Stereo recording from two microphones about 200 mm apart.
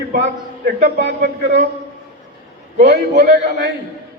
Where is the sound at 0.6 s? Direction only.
55° right (ahead or behind).